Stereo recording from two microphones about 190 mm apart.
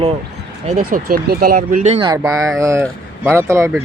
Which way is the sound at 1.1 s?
50° right (ahead or behind).